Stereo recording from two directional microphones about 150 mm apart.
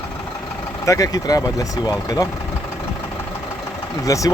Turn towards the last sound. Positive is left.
turn(degrees=20)  # may be behind; listen again after turning